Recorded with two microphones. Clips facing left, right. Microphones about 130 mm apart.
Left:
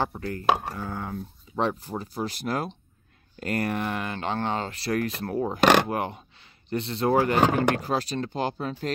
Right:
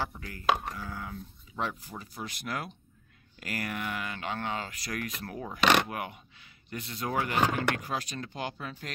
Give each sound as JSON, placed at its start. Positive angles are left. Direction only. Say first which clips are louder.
{"t": 0.0, "sound": "speech", "louder": "left 5 dB", "side_deg": 40}